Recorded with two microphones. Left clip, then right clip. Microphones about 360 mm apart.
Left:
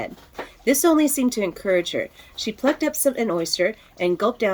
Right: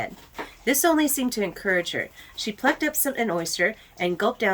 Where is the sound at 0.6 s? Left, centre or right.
Centre.